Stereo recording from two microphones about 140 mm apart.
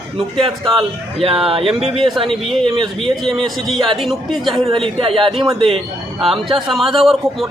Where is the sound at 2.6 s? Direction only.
40° right (ahead or behind).